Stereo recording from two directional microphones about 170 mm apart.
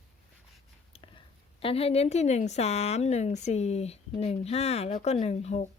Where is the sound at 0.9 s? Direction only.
30° left (ahead or behind).